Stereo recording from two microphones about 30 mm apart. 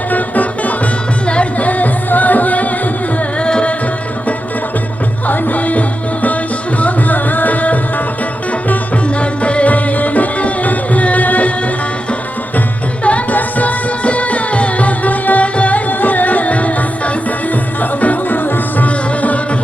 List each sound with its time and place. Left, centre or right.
0.1 s music: left
1.3 s music: left
1.6 s music: left
3.3 s music: left
5.3 s music: left
6.7 s tabla: left
9.0 s music: left
9.7 s music: left
13.3 s music: left
15.5 s music: left
15.9 s music: left
18.9 s music: left